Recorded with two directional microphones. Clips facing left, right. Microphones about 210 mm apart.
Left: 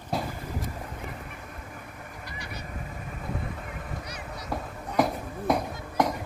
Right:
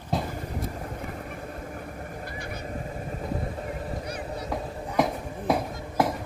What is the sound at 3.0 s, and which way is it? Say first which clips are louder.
Vehicle: right 3 dB; 35° right (ahead or behind).